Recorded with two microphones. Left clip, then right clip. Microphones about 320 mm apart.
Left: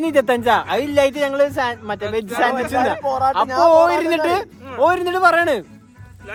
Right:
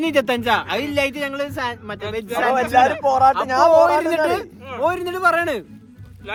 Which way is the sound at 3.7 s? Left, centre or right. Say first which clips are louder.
Left 1 dB; centre.